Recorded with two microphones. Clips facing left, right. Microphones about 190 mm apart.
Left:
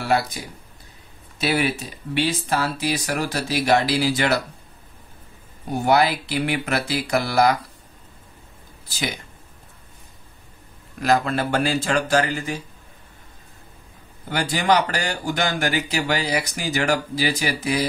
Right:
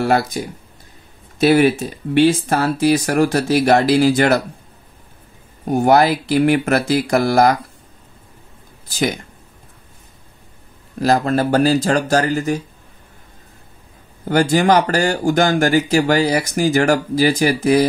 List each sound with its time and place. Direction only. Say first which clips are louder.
1.4 s speech: right 10 dB; 45° right (ahead or behind)
5.7 s speech: right 6 dB; 45° right (ahead or behind)
8.8 s speech: right 9 dB; 50° right (ahead or behind)
11.0 s speech: right 5 dB; 40° right (ahead or behind)
14.3 s speech: right 7 dB; 45° right (ahead or behind)